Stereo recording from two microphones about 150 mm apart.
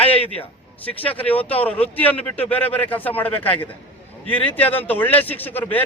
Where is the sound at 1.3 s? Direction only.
10° left (ahead or behind).